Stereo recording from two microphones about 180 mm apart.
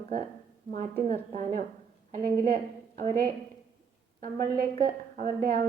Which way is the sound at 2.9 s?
50° right (ahead or behind).